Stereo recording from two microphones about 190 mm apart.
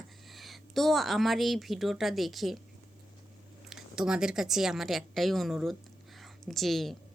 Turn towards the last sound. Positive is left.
turn(degrees=0)  # may be behind; listen again after turning